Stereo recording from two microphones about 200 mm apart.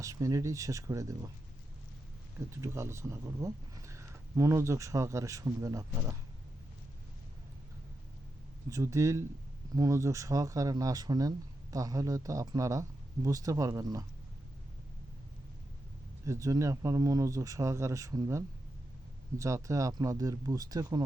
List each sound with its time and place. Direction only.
0.0 s speech: 15° right (ahead or behind)
2.6 s speech: 15° right (ahead or behind)
8.7 s speech: 15° right (ahead or behind)
16.2 s speech: 15° right (ahead or behind)